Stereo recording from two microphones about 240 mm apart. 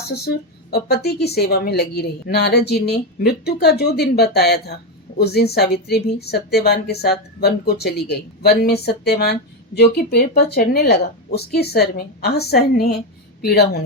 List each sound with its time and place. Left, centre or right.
0.0 s a woman's voice: left